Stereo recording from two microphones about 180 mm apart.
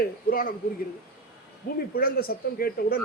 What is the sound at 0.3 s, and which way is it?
Speech, 55° left (ahead or behind).